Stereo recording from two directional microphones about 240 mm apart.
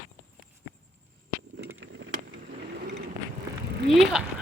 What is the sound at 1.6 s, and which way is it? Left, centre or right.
Vehicle, right.